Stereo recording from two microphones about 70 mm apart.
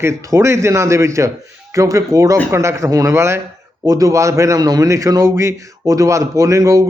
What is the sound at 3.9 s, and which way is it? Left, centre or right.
Speech, right.